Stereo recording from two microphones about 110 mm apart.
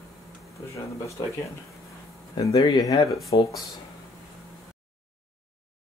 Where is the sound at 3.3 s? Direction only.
50° left (ahead or behind).